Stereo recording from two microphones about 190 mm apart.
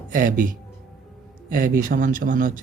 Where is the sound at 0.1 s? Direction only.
45° right (ahead or behind).